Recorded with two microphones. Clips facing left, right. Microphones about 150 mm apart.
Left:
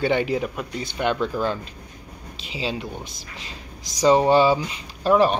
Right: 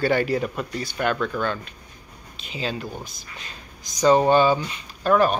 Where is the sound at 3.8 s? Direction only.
90° left.